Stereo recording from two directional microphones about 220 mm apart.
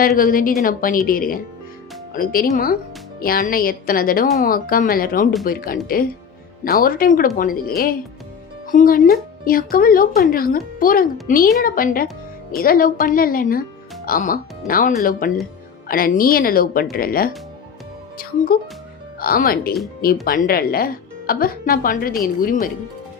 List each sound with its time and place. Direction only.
0.2 s speech: 40° left (ahead or behind)